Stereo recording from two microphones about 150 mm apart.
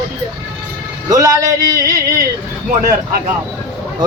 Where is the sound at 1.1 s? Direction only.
25° right (ahead or behind).